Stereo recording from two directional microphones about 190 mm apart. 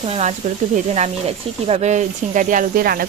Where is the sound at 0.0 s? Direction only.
30° right (ahead or behind).